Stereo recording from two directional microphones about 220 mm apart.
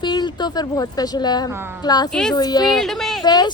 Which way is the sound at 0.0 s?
20° left (ahead or behind).